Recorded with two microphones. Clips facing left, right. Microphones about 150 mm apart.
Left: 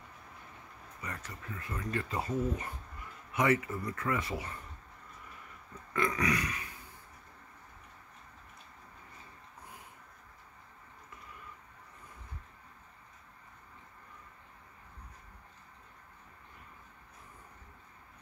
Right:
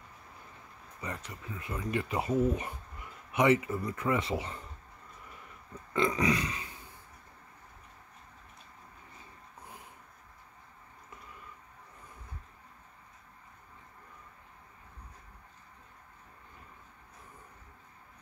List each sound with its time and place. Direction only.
1.0 s speech: 20° right (ahead or behind)
5.9 s speech: 20° right (ahead or behind)